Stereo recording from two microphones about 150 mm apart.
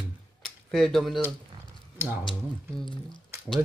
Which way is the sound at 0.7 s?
5° left (ahead or behind).